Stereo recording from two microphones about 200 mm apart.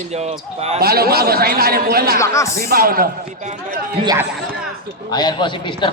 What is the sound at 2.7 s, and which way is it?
Speech, 45° right (ahead or behind).